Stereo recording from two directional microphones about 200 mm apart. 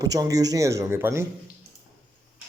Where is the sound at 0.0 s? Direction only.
20° right (ahead or behind).